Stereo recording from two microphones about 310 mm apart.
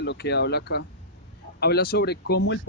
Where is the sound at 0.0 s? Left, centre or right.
Left.